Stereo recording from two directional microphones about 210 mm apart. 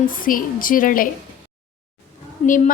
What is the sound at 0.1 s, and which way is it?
Speech, 40° left (ahead or behind).